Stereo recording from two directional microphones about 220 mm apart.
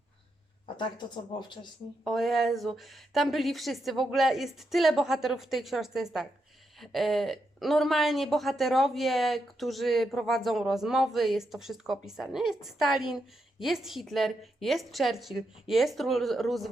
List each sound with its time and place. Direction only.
0.8 s speech: 20° left (ahead or behind)
2.0 s a woman's voice: centre (ahead or behind)